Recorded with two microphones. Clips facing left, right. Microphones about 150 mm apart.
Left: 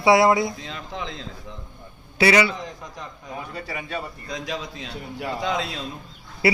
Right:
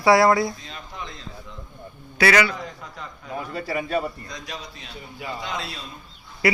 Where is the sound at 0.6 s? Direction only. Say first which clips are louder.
Left 4 dB; 90° left.